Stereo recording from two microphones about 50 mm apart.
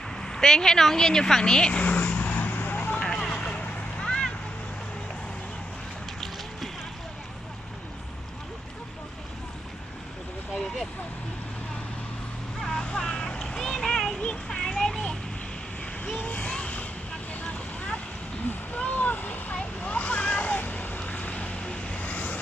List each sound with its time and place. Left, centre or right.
0.2 s speech: centre
1.7 s vehicle: left
3.0 s vehicle: centre
4.0 s a sound: centre
10.5 s vehicle: centre
12.8 s vehicle: left
14.2 s a sound: centre
16.0 s vehicle: left
18.4 s a sound: left
21.1 s vehicle: left